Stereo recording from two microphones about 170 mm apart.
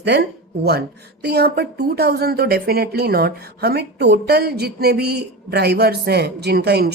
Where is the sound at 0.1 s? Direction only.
80° right.